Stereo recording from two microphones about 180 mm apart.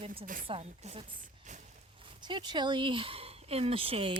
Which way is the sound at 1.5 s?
40° right (ahead or behind).